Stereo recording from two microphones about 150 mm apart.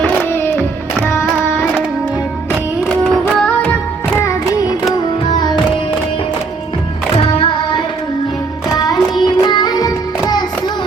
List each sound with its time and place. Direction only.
0.0 s music: 15° left (ahead or behind)
1.0 s child singing: 10° left (ahead or behind)
2.9 s music: centre (ahead or behind)
7.2 s child singing: 35° left (ahead or behind)
8.8 s music: 30° left (ahead or behind)